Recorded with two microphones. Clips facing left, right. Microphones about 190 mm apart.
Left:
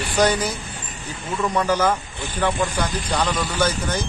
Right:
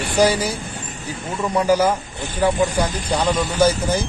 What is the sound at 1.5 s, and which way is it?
A man's voice, 10° right (ahead or behind).